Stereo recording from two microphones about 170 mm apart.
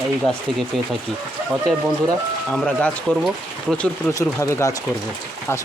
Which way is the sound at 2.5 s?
5° left (ahead or behind).